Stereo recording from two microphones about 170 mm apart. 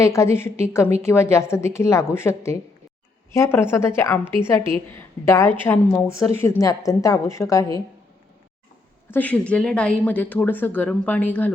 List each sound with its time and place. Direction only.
0.0 s a woman's voice: 15° left (ahead or behind)
9.0 s a woman's voice: 10° left (ahead or behind)